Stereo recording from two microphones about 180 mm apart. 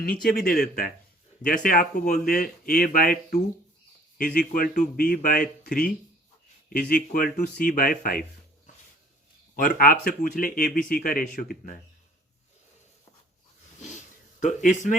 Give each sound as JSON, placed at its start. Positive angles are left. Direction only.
{"t": 0.0, "sound": "speech", "side_deg": 60}
{"t": 1.4, "sound": "speech", "side_deg": 45}
{"t": 9.6, "sound": "speech", "side_deg": 50}
{"t": 13.8, "sound": "sniff", "side_deg": 45}